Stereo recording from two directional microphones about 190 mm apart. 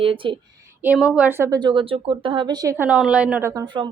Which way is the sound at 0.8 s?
5° right (ahead or behind).